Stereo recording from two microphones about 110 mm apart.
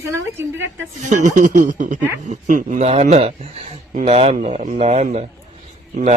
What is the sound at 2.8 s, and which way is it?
Speech, 70° right (ahead or behind).